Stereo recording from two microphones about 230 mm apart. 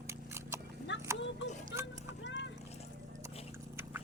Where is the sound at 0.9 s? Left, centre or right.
Left.